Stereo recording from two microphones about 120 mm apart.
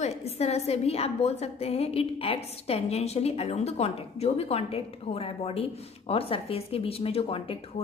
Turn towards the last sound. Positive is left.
turn(degrees=50)  # may be behind; listen again after turning